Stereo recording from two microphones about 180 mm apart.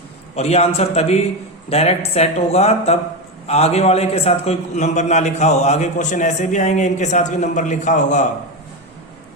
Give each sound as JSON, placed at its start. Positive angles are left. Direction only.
{"t": 0.3, "sound": "a man's voice", "side_deg": 35}